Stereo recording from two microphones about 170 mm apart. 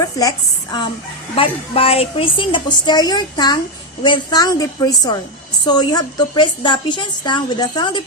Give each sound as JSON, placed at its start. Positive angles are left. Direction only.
{"t": 0.0, "sound": "a woman's voice", "side_deg": 20}
{"t": 1.4, "sound": "a woman's voice", "side_deg": 35}